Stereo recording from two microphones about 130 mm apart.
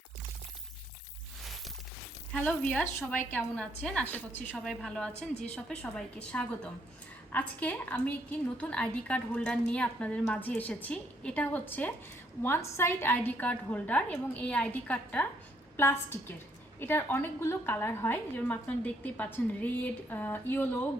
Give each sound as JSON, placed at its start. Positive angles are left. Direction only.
{"t": 2.3, "sound": "a woman's voice", "side_deg": 10}